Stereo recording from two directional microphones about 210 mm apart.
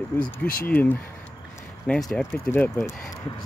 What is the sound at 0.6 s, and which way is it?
Speech, 10° left (ahead or behind).